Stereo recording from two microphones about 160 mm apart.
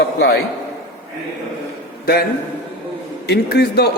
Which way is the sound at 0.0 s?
90° left.